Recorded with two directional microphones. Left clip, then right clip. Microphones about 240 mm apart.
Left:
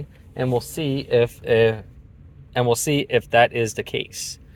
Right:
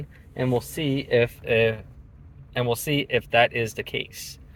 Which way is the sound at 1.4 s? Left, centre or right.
Left.